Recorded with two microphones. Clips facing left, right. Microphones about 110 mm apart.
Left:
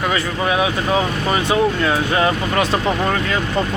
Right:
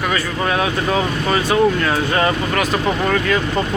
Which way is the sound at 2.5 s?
25° left (ahead or behind).